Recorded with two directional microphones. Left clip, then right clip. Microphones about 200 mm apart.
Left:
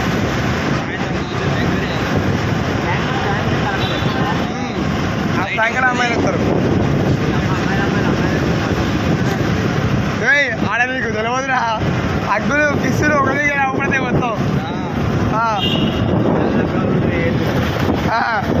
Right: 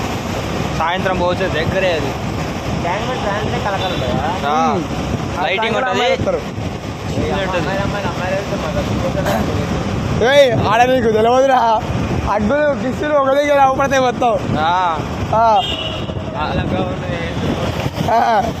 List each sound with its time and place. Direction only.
10.2 s speech: 65° right (ahead or behind)
13.3 s speech: 60° right (ahead or behind)
18.1 s speech: 50° right (ahead or behind)